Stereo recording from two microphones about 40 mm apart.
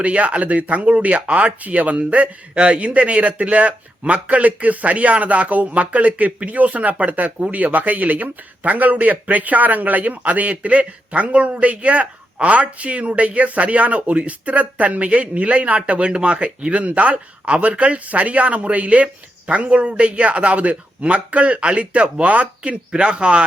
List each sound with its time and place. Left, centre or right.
0.0 s speech: right